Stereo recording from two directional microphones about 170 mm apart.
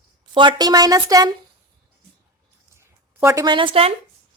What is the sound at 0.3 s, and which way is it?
Speech, 25° right (ahead or behind).